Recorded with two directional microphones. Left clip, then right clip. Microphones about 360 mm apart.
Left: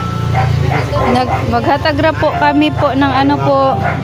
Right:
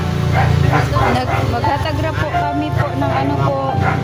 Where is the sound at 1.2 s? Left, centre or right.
Left.